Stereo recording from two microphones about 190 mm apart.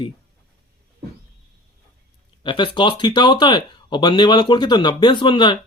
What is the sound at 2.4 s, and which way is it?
Speech, 25° left (ahead or behind).